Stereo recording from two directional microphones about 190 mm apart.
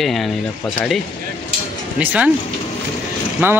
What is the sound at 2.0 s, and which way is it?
Speech, 10° right (ahead or behind).